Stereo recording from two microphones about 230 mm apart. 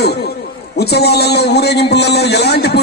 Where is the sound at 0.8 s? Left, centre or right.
Left.